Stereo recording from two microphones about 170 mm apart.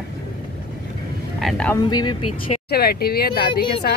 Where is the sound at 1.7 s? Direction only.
25° left (ahead or behind).